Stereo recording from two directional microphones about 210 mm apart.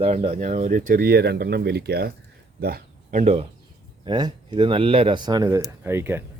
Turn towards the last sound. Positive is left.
turn(degrees=-10)  # may be behind; listen again after turning